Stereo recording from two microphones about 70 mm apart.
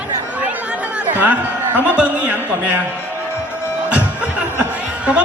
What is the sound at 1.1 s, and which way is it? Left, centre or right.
A man's voice, right.